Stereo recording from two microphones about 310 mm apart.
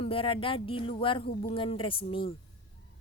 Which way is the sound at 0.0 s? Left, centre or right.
Centre.